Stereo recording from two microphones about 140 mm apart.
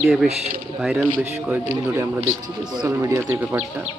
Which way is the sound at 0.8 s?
5° right (ahead or behind).